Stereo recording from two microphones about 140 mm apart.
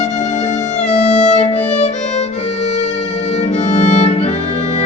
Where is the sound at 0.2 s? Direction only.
55° left (ahead or behind).